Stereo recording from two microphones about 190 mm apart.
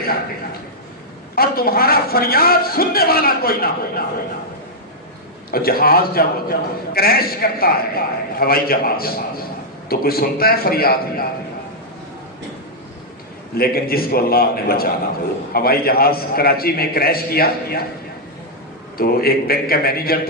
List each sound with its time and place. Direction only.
1.3 s a man's voice: 50° left (ahead or behind)
5.5 s a man's voice: 50° left (ahead or behind)
13.6 s a man's voice: 50° left (ahead or behind)
18.9 s a man's voice: 50° left (ahead or behind)